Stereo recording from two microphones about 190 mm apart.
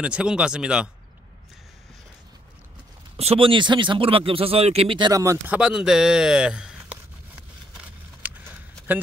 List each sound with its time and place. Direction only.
0.0 s speech: 5° right (ahead or behind)
3.2 s speech: 30° right (ahead or behind); by 7.0 s 5° right (ahead or behind)
7.7 s a sound: 5° right (ahead or behind)